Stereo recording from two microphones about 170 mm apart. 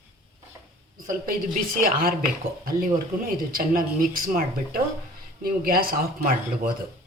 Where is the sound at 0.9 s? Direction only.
55° right (ahead or behind).